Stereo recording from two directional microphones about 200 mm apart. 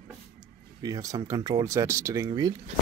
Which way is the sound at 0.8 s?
20° right (ahead or behind).